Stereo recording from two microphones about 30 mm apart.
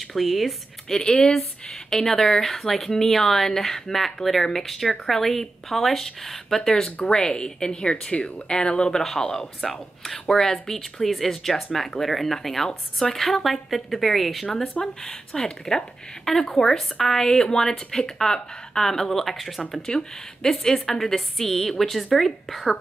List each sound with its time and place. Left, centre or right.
0.1 s speech: centre
0.8 s speech: centre
7.0 s speech: left
8.9 s speech: centre
9.6 s speech: centre
10.3 s speech: centre
10.7 s speech: centre
14.8 s speech: left
16.3 s speech: centre
19.9 s speech: left
20.7 s speech: centre